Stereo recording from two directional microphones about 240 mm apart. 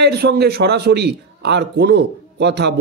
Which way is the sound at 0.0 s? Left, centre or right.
Right.